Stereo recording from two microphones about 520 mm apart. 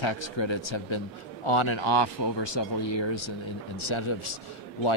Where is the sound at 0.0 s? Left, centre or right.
Left.